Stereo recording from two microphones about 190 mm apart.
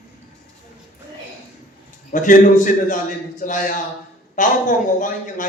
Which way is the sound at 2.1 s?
45° left (ahead or behind).